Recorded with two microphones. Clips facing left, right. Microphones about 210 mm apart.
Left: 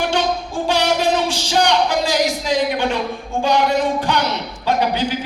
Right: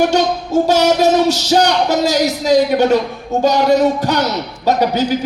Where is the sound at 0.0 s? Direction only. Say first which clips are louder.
Right 5 dB; 40° right (ahead or behind).